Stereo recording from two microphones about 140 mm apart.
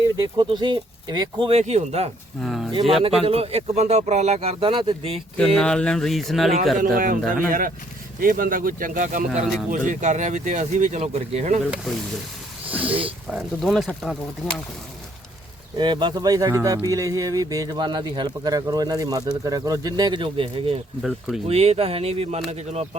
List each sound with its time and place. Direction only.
0.2 s speech: 35° right (ahead or behind)
1.5 s speech: 50° right (ahead or behind)
2.4 s a sound: centre (ahead or behind)
3.0 s speech: 45° right (ahead or behind)
5.5 s speech: 5° left (ahead or behind)
6.7 s speech: 80° right
7.2 s speech: 15° left (ahead or behind)
8.2 s speech: 85° right; by 11.6 s 55° right (ahead or behind)
11.7 s speech: centre (ahead or behind)
12.7 s speech: 10° right (ahead or behind)
13.3 s speech: centre (ahead or behind)
15.8 s speech: 35° right (ahead or behind)
21.0 s speech: centre (ahead or behind)
21.4 s speech: 45° right (ahead or behind)